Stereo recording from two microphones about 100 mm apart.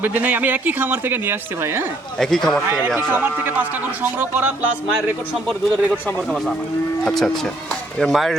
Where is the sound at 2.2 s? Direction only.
5° left (ahead or behind).